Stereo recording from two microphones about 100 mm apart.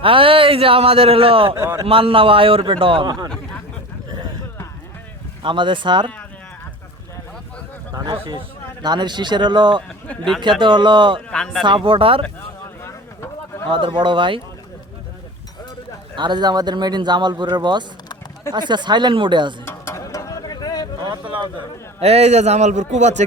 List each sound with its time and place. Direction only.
0.0 s a man's voice: 65° right (ahead or behind)
1.5 s a man's voice: 25° right (ahead or behind)
1.8 s a man's voice: 65° right (ahead or behind); by 3.2 s 50° right (ahead or behind)
5.4 s speech: 55° right (ahead or behind)
7.9 s speech: 50° right (ahead or behind)
11.3 s speech: 5° left (ahead or behind)
11.6 s a man's voice: 55° right (ahead or behind)
12.8 s a sound: 30° left (ahead or behind)
13.7 s a man's voice: 55° right (ahead or behind)
16.1 s speech: 45° right (ahead or behind)
19.6 s mechanisms: 30° left (ahead or behind)
21.0 s speech: 45° right (ahead or behind)
22.0 s a man's voice: 90° right